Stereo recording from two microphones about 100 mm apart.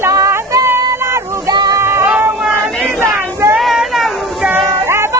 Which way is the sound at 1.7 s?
25° right (ahead or behind).